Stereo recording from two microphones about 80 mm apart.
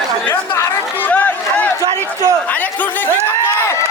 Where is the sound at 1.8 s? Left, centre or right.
Right.